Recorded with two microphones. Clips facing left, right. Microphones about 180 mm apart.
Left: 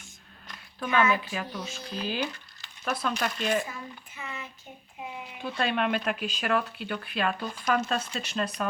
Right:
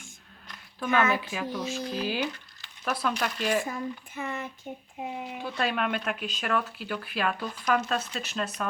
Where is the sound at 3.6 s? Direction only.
50° right (ahead or behind).